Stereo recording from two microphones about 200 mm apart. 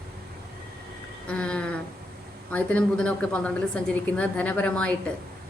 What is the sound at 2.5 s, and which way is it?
A woman's voice, 5° left (ahead or behind).